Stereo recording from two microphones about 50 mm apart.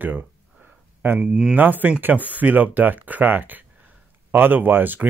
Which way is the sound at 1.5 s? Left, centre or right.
Right.